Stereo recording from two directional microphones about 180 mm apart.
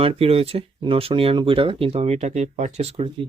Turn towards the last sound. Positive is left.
turn(degrees=-35)  # may be behind; listen again after turning